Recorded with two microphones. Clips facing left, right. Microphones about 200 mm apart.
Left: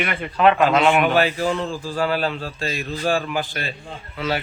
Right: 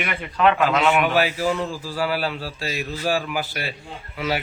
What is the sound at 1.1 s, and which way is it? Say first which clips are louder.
A man's voice: left 1 dB; 10° right (ahead or behind).